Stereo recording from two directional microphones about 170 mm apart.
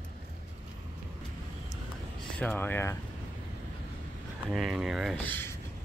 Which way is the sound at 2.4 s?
10° left (ahead or behind).